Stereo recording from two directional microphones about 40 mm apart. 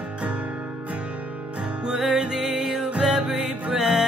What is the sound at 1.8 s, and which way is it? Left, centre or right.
Music, centre.